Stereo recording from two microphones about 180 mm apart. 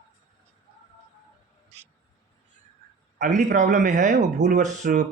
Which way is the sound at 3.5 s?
45° right (ahead or behind).